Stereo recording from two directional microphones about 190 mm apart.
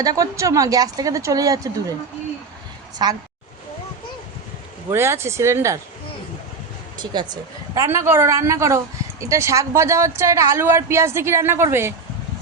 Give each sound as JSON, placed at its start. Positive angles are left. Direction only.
{"t": 0.0, "sound": "a woman's voice", "side_deg": -20}
{"t": 3.0, "sound": "speech", "side_deg": -20}
{"t": 4.9, "sound": "a woman's voice", "side_deg": -15}
{"t": 7.0, "sound": "a woman's voice", "side_deg": -25}